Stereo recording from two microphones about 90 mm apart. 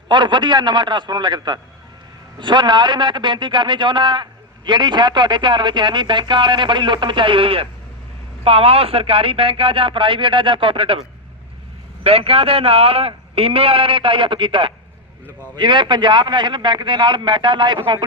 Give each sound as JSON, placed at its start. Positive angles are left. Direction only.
{"t": 0.1, "sound": "a man's voice", "side_deg": -60}
{"t": 12.0, "sound": "a man's voice", "side_deg": -90}